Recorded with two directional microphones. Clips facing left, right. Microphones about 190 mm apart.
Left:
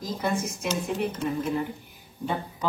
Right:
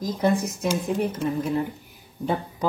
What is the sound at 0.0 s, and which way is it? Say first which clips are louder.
Speech: right 6 dB; 35° right (ahead or behind).